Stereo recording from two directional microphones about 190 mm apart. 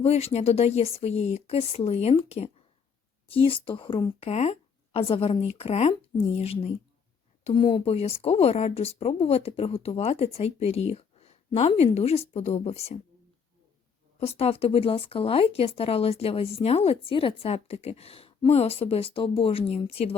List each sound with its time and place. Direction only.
0.0 s speech: 35° left (ahead or behind)
14.2 s speech: 30° left (ahead or behind)